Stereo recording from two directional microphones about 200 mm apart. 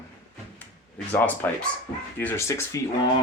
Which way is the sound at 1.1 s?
10° left (ahead or behind).